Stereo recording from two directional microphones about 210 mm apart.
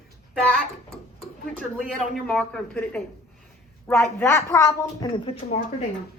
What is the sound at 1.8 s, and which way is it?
A woman's voice, centre (ahead or behind).